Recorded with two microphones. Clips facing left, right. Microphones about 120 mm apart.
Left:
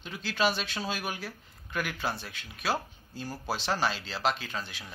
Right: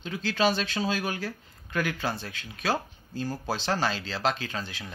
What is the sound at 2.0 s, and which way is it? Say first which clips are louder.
Speech: right 2 dB; 35° right (ahead or behind).